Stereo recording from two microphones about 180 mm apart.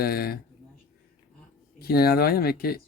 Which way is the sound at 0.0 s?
55° left (ahead or behind).